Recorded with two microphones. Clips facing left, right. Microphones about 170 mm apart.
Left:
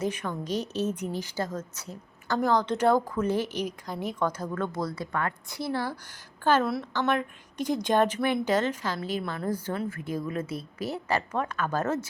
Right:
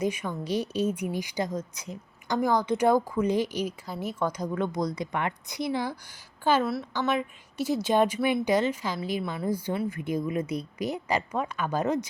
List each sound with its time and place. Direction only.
0.0 s a woman's voice: 10° right (ahead or behind)